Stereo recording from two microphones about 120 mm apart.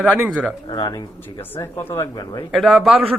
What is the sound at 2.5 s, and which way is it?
Speech, centre (ahead or behind).